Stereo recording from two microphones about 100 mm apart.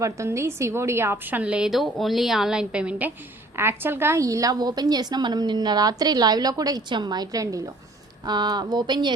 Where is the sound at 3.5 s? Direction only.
25° right (ahead or behind).